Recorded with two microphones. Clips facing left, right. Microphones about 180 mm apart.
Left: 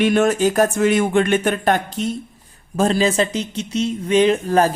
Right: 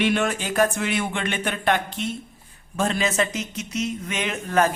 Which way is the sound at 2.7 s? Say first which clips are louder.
Left 6 dB; 35° left (ahead or behind).